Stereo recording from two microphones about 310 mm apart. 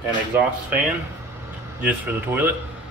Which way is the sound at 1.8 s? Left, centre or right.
Centre.